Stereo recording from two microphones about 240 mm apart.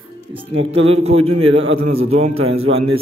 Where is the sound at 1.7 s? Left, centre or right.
Right.